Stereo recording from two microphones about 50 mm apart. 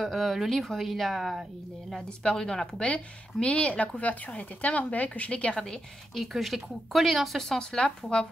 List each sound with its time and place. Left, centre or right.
0.0 s speech: centre
2.0 s a woman's voice: centre
5.6 s a woman's voice: centre
6.2 s speech: centre